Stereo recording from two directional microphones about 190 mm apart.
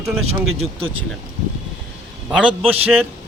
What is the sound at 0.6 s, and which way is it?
Speech, 30° right (ahead or behind).